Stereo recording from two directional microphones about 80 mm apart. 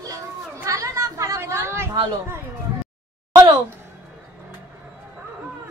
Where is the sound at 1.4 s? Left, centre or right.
Right.